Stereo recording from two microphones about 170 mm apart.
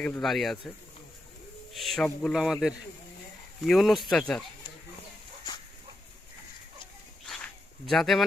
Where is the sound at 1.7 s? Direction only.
Centre (ahead or behind).